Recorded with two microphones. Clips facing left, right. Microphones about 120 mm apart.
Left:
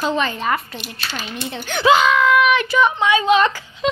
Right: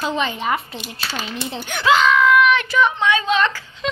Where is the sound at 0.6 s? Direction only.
25° right (ahead or behind).